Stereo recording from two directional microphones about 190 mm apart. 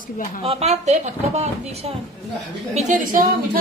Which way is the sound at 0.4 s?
30° right (ahead or behind).